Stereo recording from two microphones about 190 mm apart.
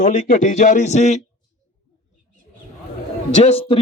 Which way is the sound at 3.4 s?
30° left (ahead or behind).